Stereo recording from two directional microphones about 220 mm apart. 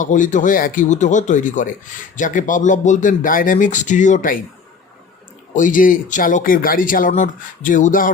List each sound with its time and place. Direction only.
0.0 s speech: 35° left (ahead or behind)
5.5 s speech: 35° left (ahead or behind)